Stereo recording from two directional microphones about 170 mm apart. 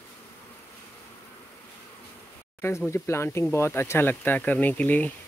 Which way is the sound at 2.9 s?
15° left (ahead or behind).